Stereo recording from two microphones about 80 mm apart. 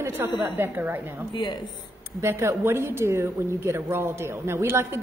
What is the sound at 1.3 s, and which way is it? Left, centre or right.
Speech, left.